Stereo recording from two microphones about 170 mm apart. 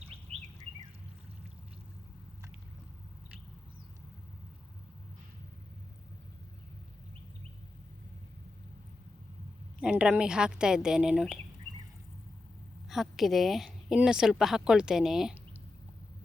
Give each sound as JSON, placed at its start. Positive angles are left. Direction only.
{"t": 0.0, "sound": "chirp", "side_deg": -35}
{"t": 9.8, "sound": "a woman's voice", "side_deg": -5}
{"t": 12.9, "sound": "a woman's voice", "side_deg": 0}